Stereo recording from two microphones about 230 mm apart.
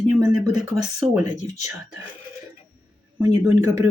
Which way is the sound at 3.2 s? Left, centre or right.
Centre.